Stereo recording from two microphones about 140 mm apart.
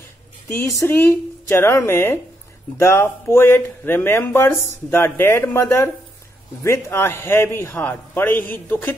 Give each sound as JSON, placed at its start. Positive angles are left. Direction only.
{"t": 0.6, "sound": "speech", "side_deg": 20}